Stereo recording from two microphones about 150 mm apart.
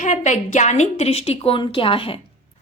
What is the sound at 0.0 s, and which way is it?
A woman's voice, 55° left (ahead or behind).